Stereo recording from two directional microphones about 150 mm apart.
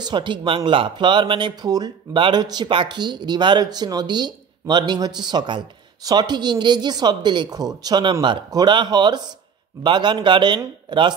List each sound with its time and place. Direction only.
0.0 s speech: 30° right (ahead or behind)